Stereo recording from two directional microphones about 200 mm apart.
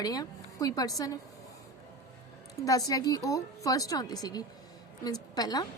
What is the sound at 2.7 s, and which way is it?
A woman's voice, 15° left (ahead or behind).